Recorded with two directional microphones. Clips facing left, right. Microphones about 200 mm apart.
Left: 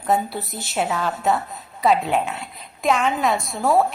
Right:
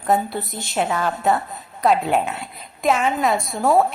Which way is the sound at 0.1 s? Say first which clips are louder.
Right 1 dB; centre (ahead or behind).